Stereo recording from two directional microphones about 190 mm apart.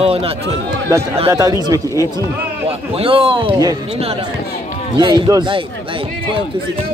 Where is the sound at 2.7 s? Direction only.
30° right (ahead or behind).